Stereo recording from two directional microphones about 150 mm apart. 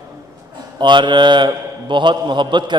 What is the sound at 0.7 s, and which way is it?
A man's voice, 30° right (ahead or behind).